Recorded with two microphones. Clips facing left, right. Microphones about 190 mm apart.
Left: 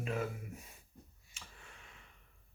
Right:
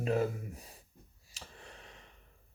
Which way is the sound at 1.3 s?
35° right (ahead or behind).